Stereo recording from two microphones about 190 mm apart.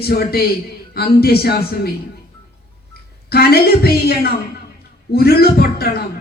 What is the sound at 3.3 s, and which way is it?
A woman's voice, 55° left (ahead or behind).